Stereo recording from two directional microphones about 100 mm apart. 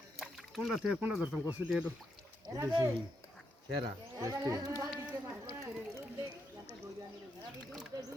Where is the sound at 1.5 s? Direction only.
15° right (ahead or behind).